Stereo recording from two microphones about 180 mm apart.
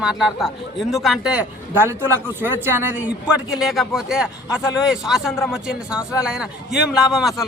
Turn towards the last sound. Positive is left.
turn(degrees=0)  # may be behind; listen again after turning